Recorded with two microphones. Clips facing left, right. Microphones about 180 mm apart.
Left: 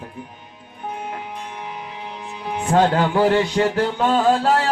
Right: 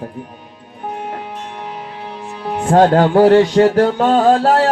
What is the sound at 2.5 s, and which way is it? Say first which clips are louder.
Music: right 6 dB; 45° right (ahead or behind).